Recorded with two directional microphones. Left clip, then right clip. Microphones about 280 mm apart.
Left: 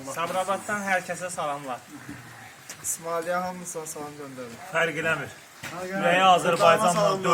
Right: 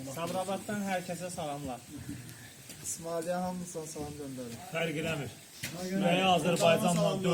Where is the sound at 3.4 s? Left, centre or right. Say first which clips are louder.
Left 6 dB; left.